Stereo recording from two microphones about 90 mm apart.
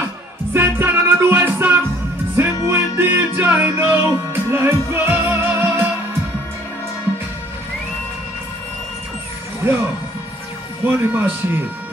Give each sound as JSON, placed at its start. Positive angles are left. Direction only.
{"t": 0.5, "sound": "music", "side_deg": -25}
{"t": 9.6, "sound": "music", "side_deg": -25}
{"t": 10.8, "sound": "speech", "side_deg": -25}